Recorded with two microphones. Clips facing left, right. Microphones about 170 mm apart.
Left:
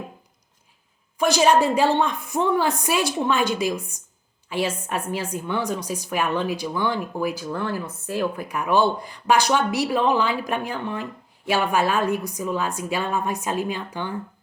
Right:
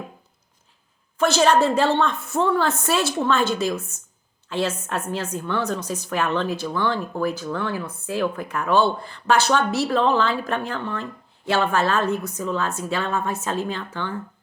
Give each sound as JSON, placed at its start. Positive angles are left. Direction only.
{"t": 1.2, "sound": "speech", "side_deg": 15}